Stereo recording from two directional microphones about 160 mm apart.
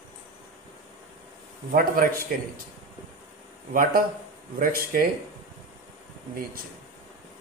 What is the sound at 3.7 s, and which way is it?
Speech, 60° right (ahead or behind).